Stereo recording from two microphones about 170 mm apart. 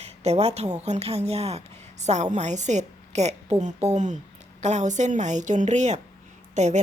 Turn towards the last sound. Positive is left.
turn(degrees=-40)  # may be behind; listen again after turning